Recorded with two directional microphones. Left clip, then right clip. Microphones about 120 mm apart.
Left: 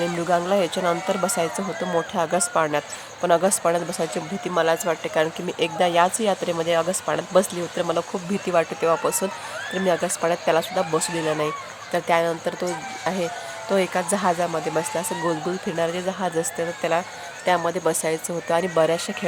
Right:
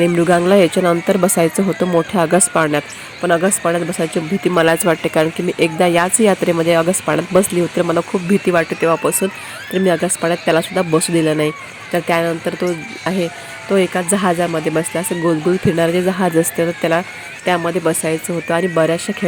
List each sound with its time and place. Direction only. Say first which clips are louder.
0.0 s speech: right 9 dB; 40° right (ahead or behind)
3.2 s speech: right 4 dB; 10° right (ahead or behind)
4.4 s speech: right 7 dB; 40° right (ahead or behind)
5.5 s speech: right 7 dB; 20° right (ahead or behind)
11.9 s speech: right 4 dB; 15° right (ahead or behind)
17.7 s speech: right 5 dB; 20° right (ahead or behind)